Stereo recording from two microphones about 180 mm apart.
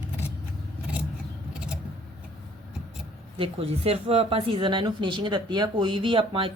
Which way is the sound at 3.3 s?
30° right (ahead or behind).